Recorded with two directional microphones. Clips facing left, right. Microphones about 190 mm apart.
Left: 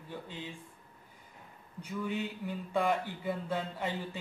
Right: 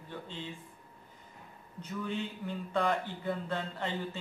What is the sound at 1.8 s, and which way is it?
Speech, 10° left (ahead or behind).